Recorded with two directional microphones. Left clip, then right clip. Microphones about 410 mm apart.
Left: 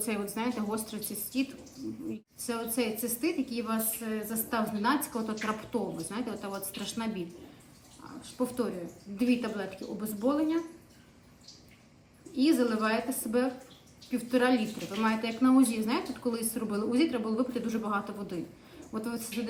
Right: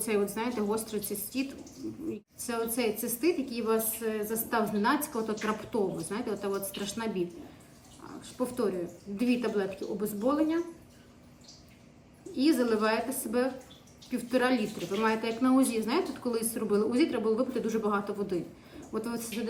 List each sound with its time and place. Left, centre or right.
0.0 s a woman's voice: centre
2.5 s a woman's voice: centre
12.4 s a woman's voice: centre